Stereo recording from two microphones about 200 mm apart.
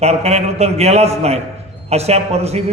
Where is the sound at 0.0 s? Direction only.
30° right (ahead or behind).